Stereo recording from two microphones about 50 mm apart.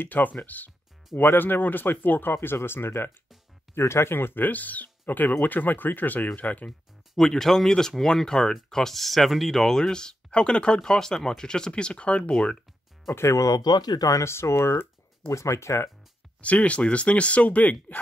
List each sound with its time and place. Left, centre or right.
0.0 s speech: left
1.1 s speech: left
2.3 s speech: left
7.2 s speech: centre
13.1 s speech: left
16.3 s speech: left